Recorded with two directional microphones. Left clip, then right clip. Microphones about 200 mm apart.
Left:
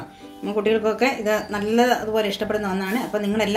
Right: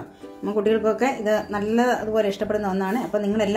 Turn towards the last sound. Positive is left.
turn(degrees=-25)  # may be behind; listen again after turning